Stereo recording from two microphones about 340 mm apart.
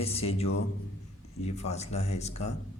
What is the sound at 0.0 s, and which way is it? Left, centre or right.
Speech, centre.